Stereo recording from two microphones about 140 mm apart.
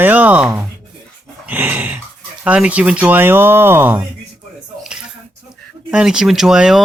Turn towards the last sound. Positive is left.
turn(degrees=-5)  # may be behind; listen again after turning